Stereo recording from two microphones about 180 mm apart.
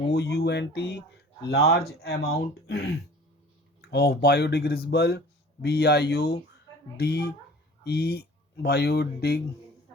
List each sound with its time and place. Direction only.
0.1 s speech: 65° left (ahead or behind)